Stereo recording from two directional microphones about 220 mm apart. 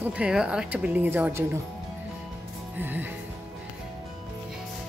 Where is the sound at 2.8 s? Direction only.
10° right (ahead or behind).